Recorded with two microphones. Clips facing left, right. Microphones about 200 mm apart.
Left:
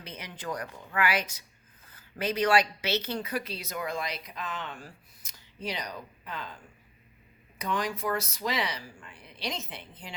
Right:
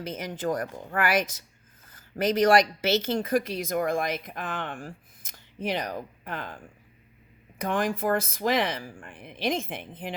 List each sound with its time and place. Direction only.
0.0 s speech: 45° right (ahead or behind)